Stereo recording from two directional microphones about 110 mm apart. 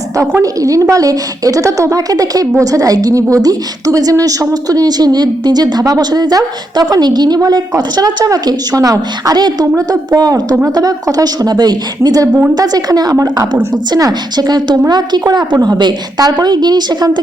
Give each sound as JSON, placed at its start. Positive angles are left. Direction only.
{"t": 0.2, "sound": "a woman's voice", "side_deg": -30}